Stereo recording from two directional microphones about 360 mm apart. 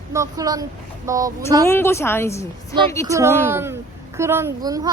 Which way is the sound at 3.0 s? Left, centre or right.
Centre.